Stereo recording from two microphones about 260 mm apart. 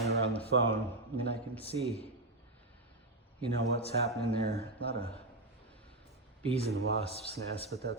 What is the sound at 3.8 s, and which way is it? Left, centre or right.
Speech, left.